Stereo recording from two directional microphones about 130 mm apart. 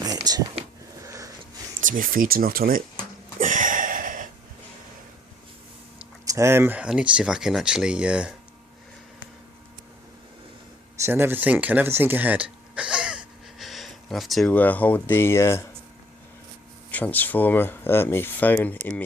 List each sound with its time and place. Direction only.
0.3 s speech: 30° right (ahead or behind)
1.0 s a sound: 25° right (ahead or behind)
1.8 s speech: 85° right
3.3 s a sound: 90° right
6.2 s speech: 25° right (ahead or behind); by 8.3 s 10° right (ahead or behind)
11.0 s speech: 15° right (ahead or behind); by 14.5 s centre (ahead or behind)
14.5 s speech: 15° left (ahead or behind)
16.9 s speech: 10° left (ahead or behind)